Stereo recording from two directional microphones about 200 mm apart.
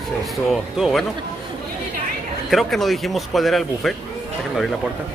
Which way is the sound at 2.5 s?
Centre (ahead or behind).